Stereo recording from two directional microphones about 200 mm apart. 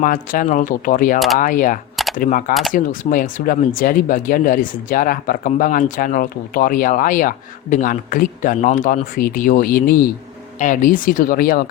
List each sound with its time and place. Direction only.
0.0 s speech: 45° left (ahead or behind)